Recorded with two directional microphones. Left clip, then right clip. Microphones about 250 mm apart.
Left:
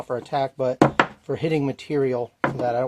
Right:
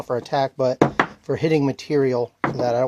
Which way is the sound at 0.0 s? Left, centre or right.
Right.